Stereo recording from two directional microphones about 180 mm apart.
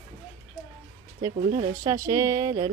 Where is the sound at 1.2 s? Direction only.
25° right (ahead or behind).